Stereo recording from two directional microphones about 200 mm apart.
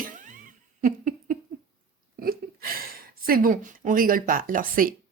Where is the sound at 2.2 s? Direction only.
50° right (ahead or behind).